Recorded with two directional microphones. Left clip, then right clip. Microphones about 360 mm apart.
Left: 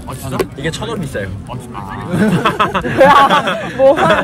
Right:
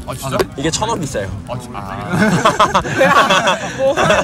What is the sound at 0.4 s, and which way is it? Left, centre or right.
Speech, centre.